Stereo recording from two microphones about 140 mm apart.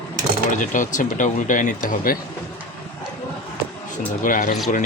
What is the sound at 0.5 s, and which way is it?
Speech, 65° left (ahead or behind).